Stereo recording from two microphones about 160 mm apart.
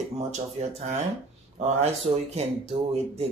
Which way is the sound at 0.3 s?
45° right (ahead or behind).